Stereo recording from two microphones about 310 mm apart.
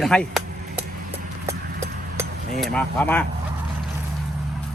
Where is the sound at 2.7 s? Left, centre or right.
Centre.